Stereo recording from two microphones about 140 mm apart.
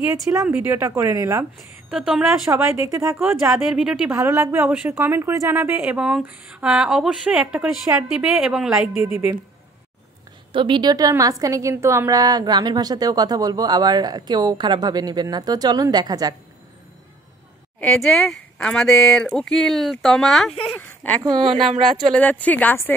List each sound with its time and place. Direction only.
0.5 s a woman's voice: 15° right (ahead or behind)
1.9 s a woman's voice: 5° right (ahead or behind)
2.5 s a woman's voice: 20° right (ahead or behind)
3.2 s a woman's voice: centre (ahead or behind)
4.1 s a woman's voice: 25° right (ahead or behind)
5.8 s a woman's voice: 5° right (ahead or behind)
10.5 s a woman's voice: 35° right (ahead or behind)
17.7 s a woman's voice: 5° left (ahead or behind)
21.2 s speech: 35° right (ahead or behind)
21.9 s speech: 10° left (ahead or behind)